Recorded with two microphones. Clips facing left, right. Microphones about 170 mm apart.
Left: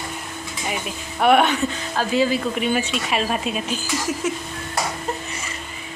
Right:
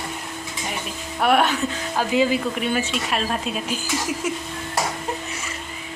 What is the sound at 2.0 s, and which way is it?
Speech, 15° right (ahead or behind).